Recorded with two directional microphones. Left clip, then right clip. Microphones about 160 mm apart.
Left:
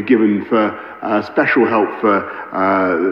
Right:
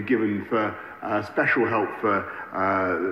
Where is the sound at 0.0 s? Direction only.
40° left (ahead or behind).